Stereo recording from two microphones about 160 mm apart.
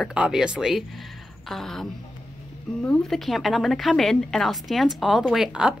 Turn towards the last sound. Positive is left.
turn(degrees=-5)  # may be behind; listen again after turning